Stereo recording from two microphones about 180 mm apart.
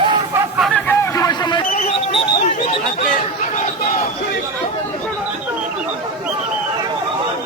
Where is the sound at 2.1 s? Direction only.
35° left (ahead or behind).